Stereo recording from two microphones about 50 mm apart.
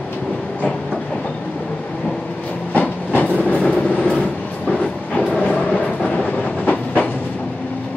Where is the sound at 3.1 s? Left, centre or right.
Left.